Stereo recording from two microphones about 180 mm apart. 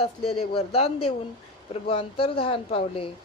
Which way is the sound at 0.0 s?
35° left (ahead or behind).